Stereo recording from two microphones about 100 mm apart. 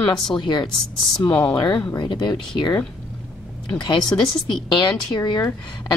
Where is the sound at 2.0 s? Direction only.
45° left (ahead or behind).